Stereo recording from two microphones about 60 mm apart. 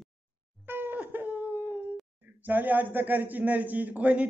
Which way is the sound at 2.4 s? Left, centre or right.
Right.